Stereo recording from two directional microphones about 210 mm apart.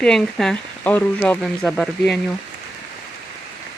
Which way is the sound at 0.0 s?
5° left (ahead or behind).